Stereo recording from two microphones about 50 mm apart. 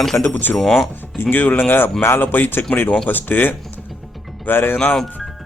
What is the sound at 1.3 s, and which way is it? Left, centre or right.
A man's voice, left.